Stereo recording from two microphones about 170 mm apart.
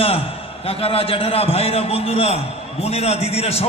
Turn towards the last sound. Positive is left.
turn(degrees=35)  # may be behind; listen again after turning